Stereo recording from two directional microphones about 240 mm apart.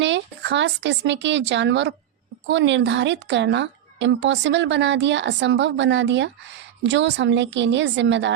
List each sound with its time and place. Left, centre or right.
0.0 s speech: right